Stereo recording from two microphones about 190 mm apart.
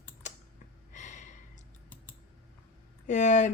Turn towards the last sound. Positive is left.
turn(degrees=40)  # may be behind; listen again after turning